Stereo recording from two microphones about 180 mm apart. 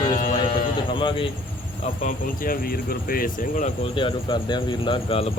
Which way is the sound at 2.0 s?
50° left (ahead or behind).